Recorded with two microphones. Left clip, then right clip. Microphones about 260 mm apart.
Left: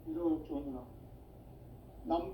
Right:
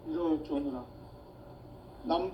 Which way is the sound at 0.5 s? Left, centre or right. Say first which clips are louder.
Right 7 dB; right.